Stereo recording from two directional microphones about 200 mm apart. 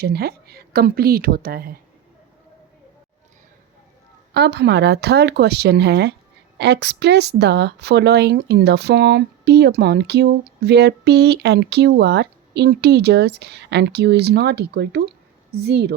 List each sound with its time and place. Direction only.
0.0 s a woman's voice: 50° right (ahead or behind)
4.4 s speech: 55° right (ahead or behind)